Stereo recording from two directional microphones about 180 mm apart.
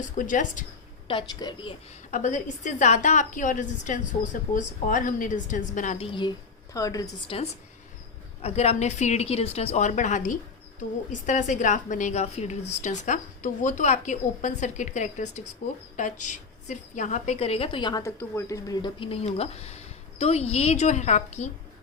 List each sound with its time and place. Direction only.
0.0 s a woman's voice: 45° left (ahead or behind)
1.0 s a woman's voice: 25° left (ahead or behind)
2.0 s a woman's voice: 45° left (ahead or behind)
6.1 s a woman's voice: 25° left (ahead or behind)
8.4 s a woman's voice: 35° left (ahead or behind)